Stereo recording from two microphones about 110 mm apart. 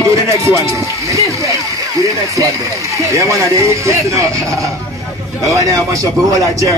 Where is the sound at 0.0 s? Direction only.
30° right (ahead or behind).